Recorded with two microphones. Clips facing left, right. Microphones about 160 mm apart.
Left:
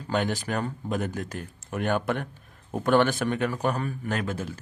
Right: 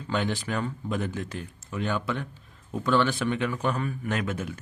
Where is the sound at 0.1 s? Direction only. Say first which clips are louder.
Left 1 dB; 45° left (ahead or behind).